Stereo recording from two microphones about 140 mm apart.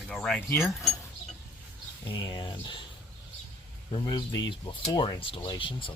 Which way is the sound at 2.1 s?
35° left (ahead or behind).